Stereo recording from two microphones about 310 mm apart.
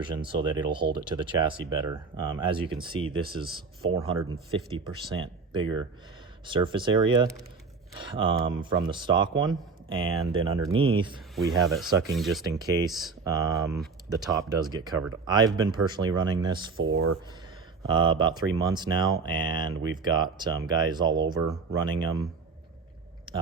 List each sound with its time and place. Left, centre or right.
0.2 s speech: centre
11.3 s speech: centre
12.6 s speech: centre
12.9 s speech: centre
13.2 s speech: centre
13.7 s speech: centre
14.3 s speech: centre
16.8 s speech: right
17.9 s speech: centre